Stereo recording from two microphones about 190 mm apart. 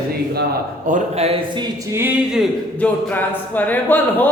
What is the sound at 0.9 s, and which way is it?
Speech, 40° right (ahead or behind).